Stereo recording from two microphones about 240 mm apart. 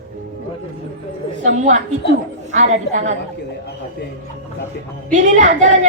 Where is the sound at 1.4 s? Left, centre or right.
Right.